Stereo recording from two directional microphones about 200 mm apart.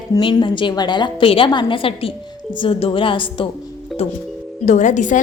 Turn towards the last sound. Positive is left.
turn(degrees=40)  # may be behind; listen again after turning